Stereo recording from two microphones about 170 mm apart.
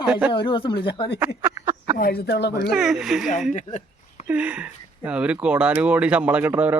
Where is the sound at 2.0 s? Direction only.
65° left (ahead or behind).